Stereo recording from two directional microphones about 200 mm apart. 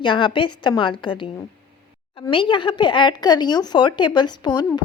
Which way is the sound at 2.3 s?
25° left (ahead or behind).